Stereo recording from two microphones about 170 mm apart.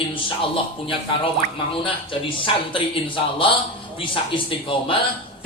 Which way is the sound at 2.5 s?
30° left (ahead or behind).